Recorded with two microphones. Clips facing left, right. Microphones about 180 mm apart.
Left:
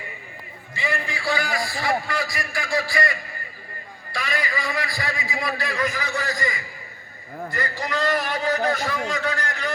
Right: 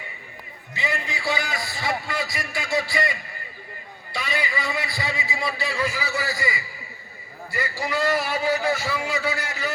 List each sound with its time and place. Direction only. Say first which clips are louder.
0.7 s a sound: left 1 dB; 20° right (ahead or behind)
4.1 s a man's voice: even; 25° right (ahead or behind)
5.7 s a man's voice: left 1 dB; 10° right (ahead or behind)